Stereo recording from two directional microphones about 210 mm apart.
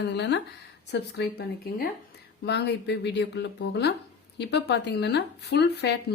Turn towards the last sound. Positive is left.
turn(degrees=50)  # may be behind; listen again after turning